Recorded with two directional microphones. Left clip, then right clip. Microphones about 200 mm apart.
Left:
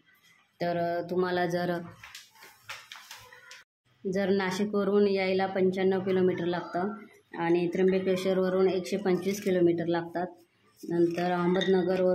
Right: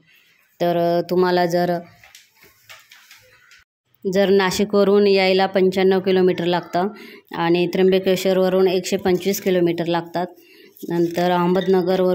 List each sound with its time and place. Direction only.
0.6 s speech: 40° right (ahead or behind)
4.1 s speech: 35° right (ahead or behind)